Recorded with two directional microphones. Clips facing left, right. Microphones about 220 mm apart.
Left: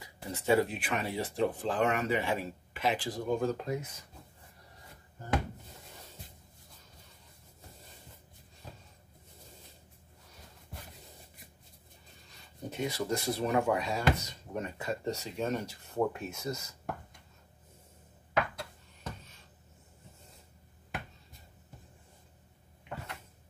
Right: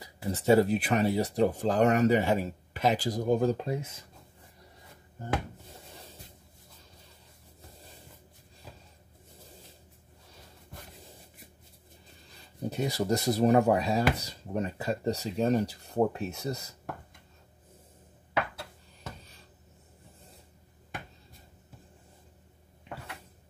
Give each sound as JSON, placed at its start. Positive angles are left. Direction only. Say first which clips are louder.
{"t": 0.0, "sound": "speech", "louder": "right 6 dB", "side_deg": -35}
{"t": 12.6, "sound": "speech", "louder": "right 4 dB", "side_deg": -35}